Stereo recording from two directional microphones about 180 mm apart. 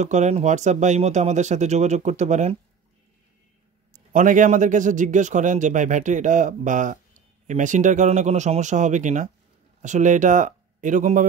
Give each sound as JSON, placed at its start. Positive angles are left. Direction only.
{"t": 0.0, "sound": "speech", "side_deg": -40}
{"t": 4.1, "sound": "a man's voice", "side_deg": -45}